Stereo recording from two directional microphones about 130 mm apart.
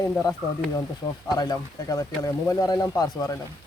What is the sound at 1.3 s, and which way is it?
Speech, 30° left (ahead or behind).